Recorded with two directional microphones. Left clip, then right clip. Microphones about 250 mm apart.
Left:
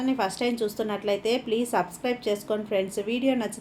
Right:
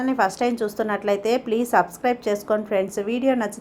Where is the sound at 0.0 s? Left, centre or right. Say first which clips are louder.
Right 5 dB; centre.